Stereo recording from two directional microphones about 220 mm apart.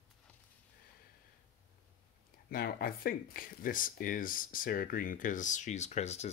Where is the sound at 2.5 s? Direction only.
45° left (ahead or behind).